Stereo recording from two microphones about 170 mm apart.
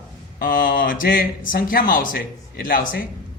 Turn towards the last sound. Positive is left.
turn(degrees=55)  # may be behind; listen again after turning